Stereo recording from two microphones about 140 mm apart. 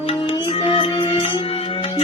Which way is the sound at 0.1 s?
35° left (ahead or behind).